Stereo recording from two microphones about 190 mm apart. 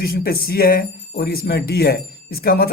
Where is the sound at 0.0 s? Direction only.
55° left (ahead or behind).